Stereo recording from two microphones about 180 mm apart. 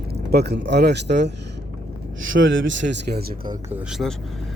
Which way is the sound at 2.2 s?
90° right.